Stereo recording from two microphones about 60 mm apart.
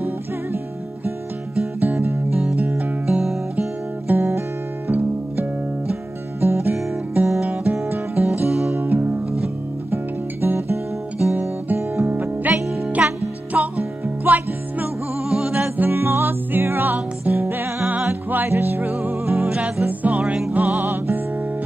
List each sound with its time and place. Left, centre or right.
1.8 s music: right
3.1 s music: centre
4.1 s music: right
6.4 s music: right
10.4 s music: right
13.0 s music: right
15.2 s music: centre
15.8 s music: right
19.3 s music: centre